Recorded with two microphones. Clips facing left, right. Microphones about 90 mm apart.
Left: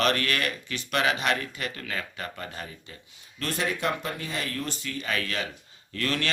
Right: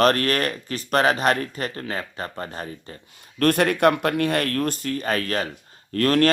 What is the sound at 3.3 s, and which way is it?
Speech, 60° right (ahead or behind).